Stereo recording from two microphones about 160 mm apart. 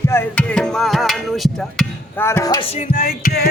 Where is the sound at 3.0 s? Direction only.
65° left (ahead or behind).